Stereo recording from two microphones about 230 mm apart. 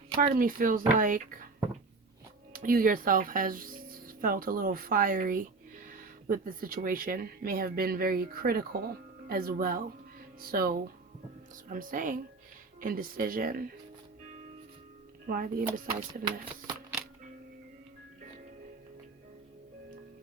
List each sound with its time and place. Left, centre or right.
0.2 s speech: right
2.5 s speech: right
15.3 s speech: right
16.0 s speech: centre